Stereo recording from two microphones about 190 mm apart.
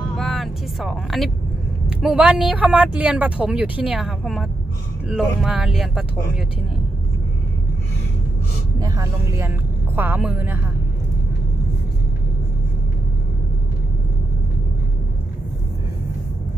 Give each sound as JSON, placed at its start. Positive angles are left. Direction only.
{"t": 0.2, "sound": "vehicle", "side_deg": 0}
{"t": 1.9, "sound": "a woman's voice", "side_deg": -5}
{"t": 8.7, "sound": "speech", "side_deg": -20}